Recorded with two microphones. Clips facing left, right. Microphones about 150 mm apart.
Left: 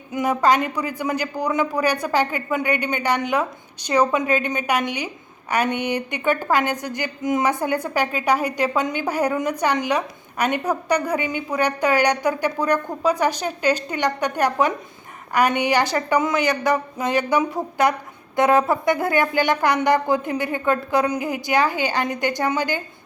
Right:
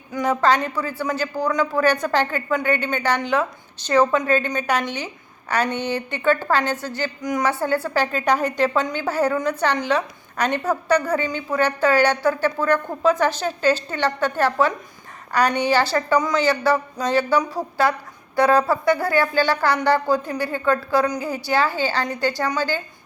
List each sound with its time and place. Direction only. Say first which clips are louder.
0.1 s a woman's voice: even; 15° left (ahead or behind)